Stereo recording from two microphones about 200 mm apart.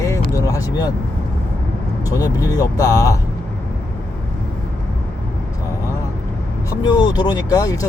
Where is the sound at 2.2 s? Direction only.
20° left (ahead or behind).